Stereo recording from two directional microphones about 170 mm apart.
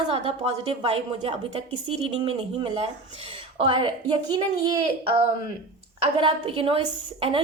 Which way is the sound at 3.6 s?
30° right (ahead or behind).